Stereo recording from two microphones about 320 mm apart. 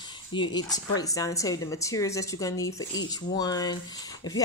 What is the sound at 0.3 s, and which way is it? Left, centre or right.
Speech, centre.